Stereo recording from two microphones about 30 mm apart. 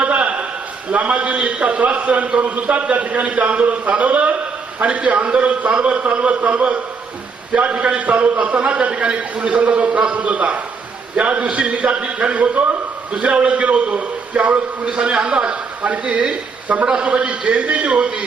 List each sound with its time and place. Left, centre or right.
0.0 s a sound: right
0.9 s a man's voice: right
2.9 s a man's voice: right
8.0 s a man's voice: right
14.8 s a man's voice: right
15.8 s a man's voice: right
17.2 s a man's voice: right